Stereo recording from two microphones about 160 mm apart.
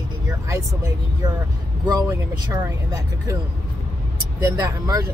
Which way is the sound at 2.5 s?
25° right (ahead or behind).